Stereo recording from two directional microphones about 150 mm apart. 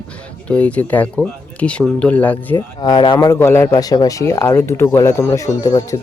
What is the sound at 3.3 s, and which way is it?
Speech, 15° left (ahead or behind).